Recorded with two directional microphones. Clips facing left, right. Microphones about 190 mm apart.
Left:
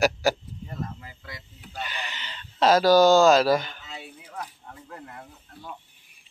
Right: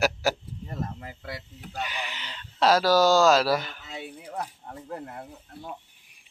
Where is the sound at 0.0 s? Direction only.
5° right (ahead or behind).